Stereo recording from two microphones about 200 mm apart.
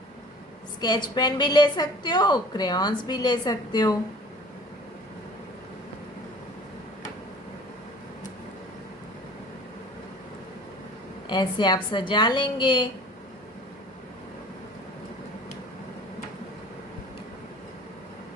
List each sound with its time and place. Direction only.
0.8 s a woman's voice: 20° left (ahead or behind)
11.3 s a woman's voice: 20° left (ahead or behind)